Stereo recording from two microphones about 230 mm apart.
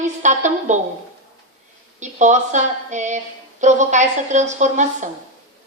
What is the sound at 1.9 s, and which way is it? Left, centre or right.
A woman's voice, right.